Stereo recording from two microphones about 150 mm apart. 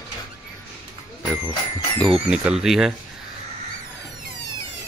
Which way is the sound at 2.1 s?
5° right (ahead or behind).